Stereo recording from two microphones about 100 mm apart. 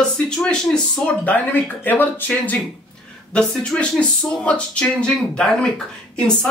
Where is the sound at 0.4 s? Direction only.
5° left (ahead or behind).